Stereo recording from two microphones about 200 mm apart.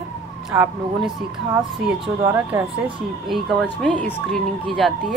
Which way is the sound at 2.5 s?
15° right (ahead or behind).